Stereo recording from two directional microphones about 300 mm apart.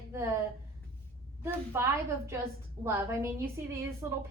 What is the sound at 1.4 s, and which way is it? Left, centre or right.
Speech, centre.